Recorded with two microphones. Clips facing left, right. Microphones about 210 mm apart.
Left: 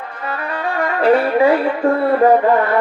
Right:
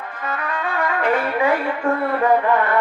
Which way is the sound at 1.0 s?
35° left (ahead or behind).